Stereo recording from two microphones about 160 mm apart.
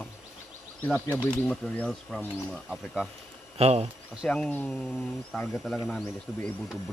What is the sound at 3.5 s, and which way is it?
Speech, 40° right (ahead or behind).